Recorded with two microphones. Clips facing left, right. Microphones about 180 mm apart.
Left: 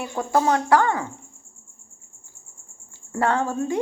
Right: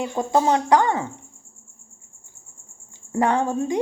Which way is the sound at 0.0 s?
20° right (ahead or behind).